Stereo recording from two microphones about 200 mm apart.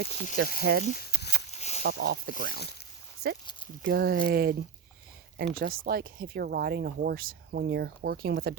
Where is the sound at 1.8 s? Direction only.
55° right (ahead or behind).